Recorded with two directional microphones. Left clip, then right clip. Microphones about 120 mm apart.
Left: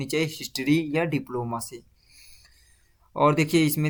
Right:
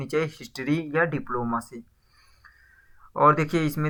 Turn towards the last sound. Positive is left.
turn(degrees=25)  # may be behind; listen again after turning